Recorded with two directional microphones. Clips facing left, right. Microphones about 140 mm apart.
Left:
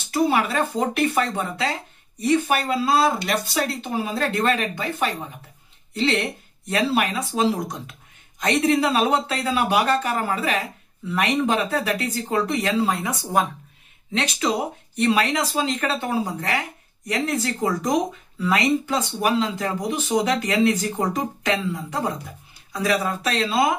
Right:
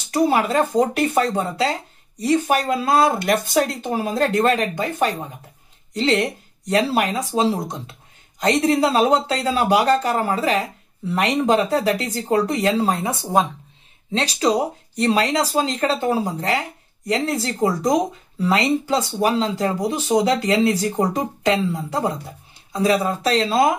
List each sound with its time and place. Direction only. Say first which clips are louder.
0.1 s speech: right 3 dB; 35° right (ahead or behind)
13.2 s speech: right 3 dB; 20° right (ahead or behind)
14.1 s speech: right 4 dB; 35° right (ahead or behind)